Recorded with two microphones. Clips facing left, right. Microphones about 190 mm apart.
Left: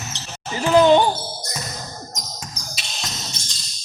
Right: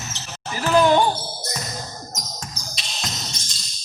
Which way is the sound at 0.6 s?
20° left (ahead or behind).